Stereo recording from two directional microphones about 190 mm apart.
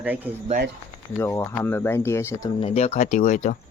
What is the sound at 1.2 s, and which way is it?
Speech, 10° left (ahead or behind).